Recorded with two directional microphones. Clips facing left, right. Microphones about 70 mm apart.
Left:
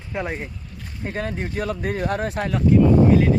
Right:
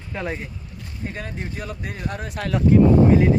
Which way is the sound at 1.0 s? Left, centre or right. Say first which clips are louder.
Left 5 dB; left.